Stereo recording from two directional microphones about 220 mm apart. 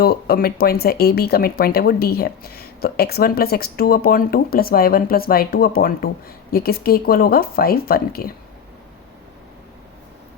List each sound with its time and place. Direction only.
0.0 s speech: 45° left (ahead or behind)